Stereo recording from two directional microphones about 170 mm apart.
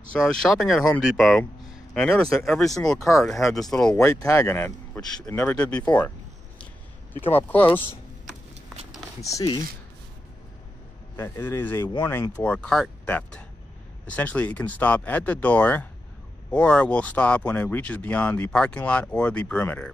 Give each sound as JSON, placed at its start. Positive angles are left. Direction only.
{"t": 0.1, "sound": "speech", "side_deg": 5}
{"t": 7.4, "sound": "speech", "side_deg": 10}
{"t": 9.2, "sound": "speech", "side_deg": 20}
{"t": 11.1, "sound": "speech", "side_deg": 15}